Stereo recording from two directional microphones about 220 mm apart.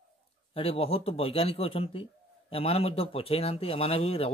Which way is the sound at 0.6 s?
25° left (ahead or behind).